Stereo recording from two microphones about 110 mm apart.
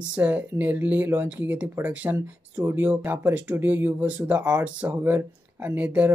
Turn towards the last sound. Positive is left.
turn(degrees=-15)  # may be behind; listen again after turning